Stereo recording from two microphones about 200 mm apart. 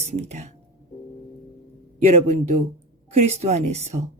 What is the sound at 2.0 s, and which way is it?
A woman's voice, 35° right (ahead or behind).